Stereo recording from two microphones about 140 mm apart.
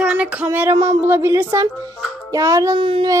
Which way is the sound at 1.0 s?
15° right (ahead or behind).